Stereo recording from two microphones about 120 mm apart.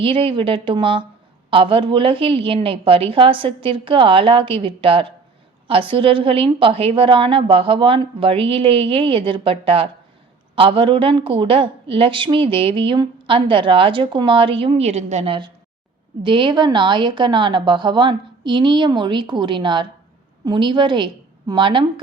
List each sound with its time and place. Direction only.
0.0 s a woman's voice: 45° right (ahead or behind)